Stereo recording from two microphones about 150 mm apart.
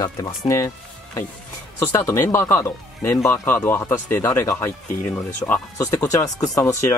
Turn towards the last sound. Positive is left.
turn(degrees=20)  # may be behind; listen again after turning